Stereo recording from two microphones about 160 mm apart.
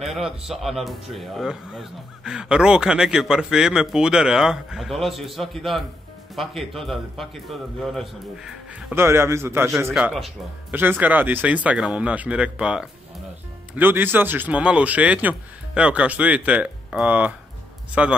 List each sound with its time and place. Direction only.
0.0 s speech: centre (ahead or behind)
8.7 s speech: 10° right (ahead or behind)
9.9 s speech: centre (ahead or behind)